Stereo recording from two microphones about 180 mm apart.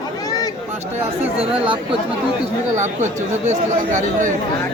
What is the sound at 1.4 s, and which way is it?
Speech, 30° right (ahead or behind).